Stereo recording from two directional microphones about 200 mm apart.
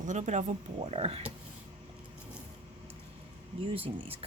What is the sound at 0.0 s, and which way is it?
Speech, 35° right (ahead or behind).